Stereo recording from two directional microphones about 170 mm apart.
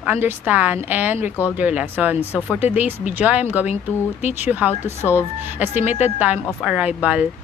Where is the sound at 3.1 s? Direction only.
10° right (ahead or behind).